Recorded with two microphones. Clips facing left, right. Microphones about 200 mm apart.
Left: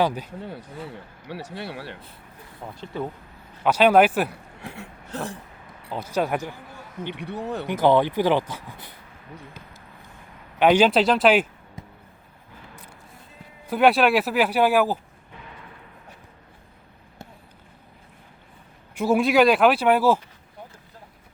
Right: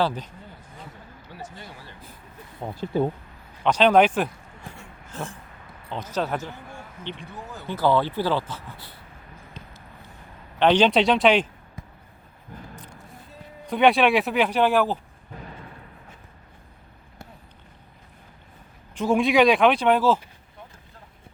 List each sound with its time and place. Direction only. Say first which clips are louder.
0.0 s speech: left 2 dB; 10° left (ahead or behind)
1.3 s speech: left 8 dB; 70° left (ahead or behind)
2.6 s speech: right 5 dB; 30° right (ahead or behind)
3.6 s speech: left 1 dB; 10° left (ahead or behind)
4.3 s a sound: left 4 dB; 65° left (ahead or behind)
5.9 s speech: left 2 dB; 10° left (ahead or behind)
7.2 s speech: left 9 dB; 70° left (ahead or behind)
7.7 s speech: left 3 dB; 20° left (ahead or behind)
10.6 s speech: left 1 dB; 10° left (ahead or behind)
12.7 s a sound: right 3 dB; 10° left (ahead or behind)
13.7 s speech: even; centre (ahead or behind)
18.9 s speech: left 1 dB; 5° left (ahead or behind)